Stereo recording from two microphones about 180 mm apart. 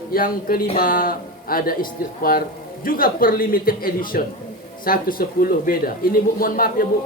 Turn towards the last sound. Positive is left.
turn(degrees=50)  # may be behind; listen again after turning